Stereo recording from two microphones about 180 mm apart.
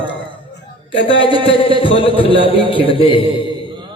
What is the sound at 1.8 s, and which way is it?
A man's voice, 30° left (ahead or behind).